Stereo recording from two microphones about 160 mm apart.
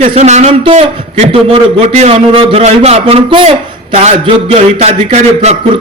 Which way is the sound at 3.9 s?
45° right (ahead or behind).